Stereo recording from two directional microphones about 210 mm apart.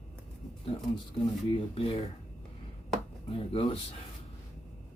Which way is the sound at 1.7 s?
25° left (ahead or behind).